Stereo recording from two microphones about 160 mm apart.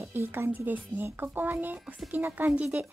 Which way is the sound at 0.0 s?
15° right (ahead or behind).